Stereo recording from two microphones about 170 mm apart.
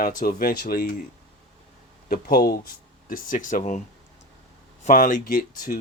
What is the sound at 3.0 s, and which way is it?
Speech, 55° left (ahead or behind).